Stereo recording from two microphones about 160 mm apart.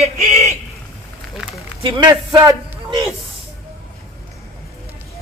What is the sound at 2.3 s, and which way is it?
Speech, 20° right (ahead or behind).